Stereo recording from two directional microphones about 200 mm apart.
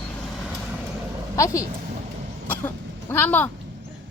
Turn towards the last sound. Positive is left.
turn(degrees=10)  # may be behind; listen again after turning